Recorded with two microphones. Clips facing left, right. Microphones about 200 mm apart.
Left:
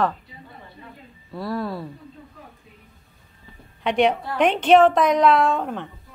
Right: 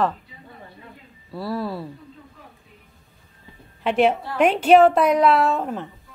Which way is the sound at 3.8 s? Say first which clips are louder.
Right 1 dB; 5° right (ahead or behind).